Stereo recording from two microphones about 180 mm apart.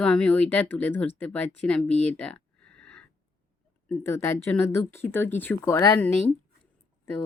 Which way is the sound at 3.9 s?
15° left (ahead or behind).